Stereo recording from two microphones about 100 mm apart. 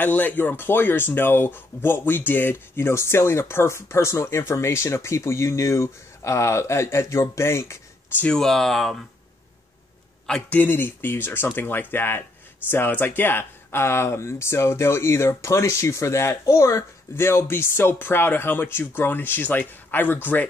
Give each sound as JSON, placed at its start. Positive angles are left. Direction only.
{"t": 0.0, "sound": "speech", "side_deg": 15}
{"t": 8.3, "sound": "speech", "side_deg": 5}
{"t": 10.2, "sound": "a man's voice", "side_deg": 5}
{"t": 10.6, "sound": "speech", "side_deg": 20}